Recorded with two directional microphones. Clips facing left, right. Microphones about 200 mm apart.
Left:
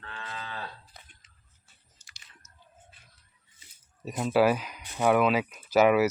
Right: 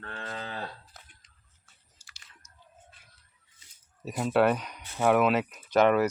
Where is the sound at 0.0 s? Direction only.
50° right (ahead or behind).